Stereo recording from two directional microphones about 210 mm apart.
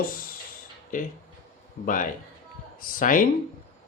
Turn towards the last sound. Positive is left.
turn(degrees=40)  # may be behind; listen again after turning